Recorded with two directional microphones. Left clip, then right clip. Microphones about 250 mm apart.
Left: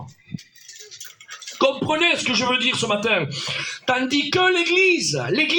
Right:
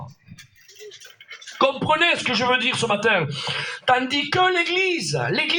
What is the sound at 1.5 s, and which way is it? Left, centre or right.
A woman's voice, right.